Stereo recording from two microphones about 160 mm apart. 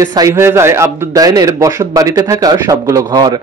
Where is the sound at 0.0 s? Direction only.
25° right (ahead or behind).